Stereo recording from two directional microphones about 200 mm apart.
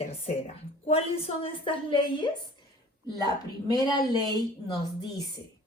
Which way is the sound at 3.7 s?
20° left (ahead or behind).